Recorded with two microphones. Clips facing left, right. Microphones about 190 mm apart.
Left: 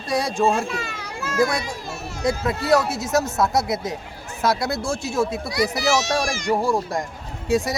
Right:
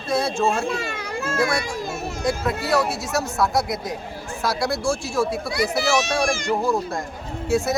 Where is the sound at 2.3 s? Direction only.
20° left (ahead or behind).